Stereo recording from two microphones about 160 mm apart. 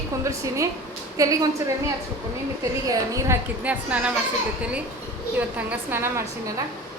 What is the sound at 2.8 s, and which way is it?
Speech, 20° right (ahead or behind).